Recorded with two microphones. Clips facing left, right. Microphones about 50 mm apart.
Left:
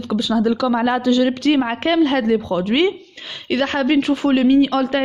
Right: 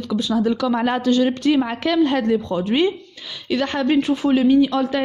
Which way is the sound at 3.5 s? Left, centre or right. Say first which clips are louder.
Left 2 dB; left.